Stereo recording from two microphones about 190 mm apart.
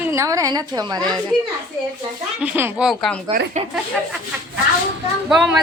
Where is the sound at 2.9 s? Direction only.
Centre (ahead or behind).